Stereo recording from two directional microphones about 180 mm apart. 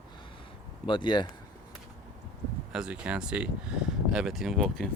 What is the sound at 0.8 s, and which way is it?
Speech, 25° left (ahead or behind).